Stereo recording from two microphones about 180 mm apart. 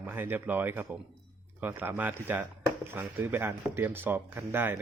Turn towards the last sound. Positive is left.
turn(degrees=-10)  # may be behind; listen again after turning